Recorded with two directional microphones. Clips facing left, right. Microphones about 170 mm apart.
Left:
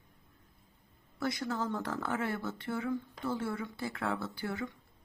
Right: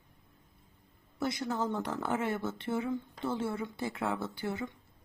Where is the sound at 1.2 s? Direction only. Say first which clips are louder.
Right 1 dB; 20° right (ahead or behind).